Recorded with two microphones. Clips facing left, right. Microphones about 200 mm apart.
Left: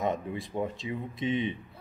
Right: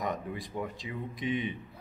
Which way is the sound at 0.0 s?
25° left (ahead or behind).